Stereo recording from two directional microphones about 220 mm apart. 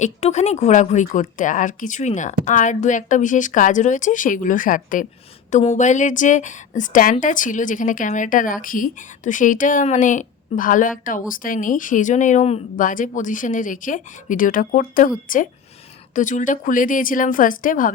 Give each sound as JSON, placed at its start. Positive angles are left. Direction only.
{"t": 0.0, "sound": "speech", "side_deg": 30}
{"t": 16.1, "sound": "speech", "side_deg": 35}